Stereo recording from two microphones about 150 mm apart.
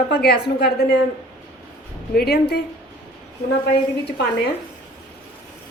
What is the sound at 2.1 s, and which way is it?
Speech, 90° left.